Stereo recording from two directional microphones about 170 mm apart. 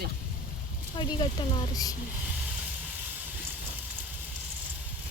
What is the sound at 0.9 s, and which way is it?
Speech, 25° left (ahead or behind).